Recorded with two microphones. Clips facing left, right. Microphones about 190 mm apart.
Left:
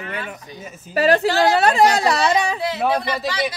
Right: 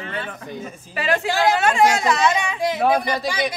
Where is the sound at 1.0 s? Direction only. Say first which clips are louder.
Left 5 dB; 40° left (ahead or behind).